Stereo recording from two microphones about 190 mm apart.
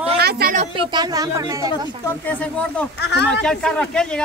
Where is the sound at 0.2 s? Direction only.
55° right (ahead or behind).